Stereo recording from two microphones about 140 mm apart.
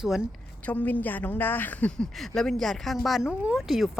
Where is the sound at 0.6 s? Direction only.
10° left (ahead or behind).